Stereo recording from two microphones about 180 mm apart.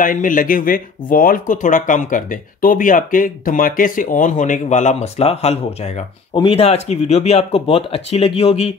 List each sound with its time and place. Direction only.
0.0 s speech: 50° left (ahead or behind)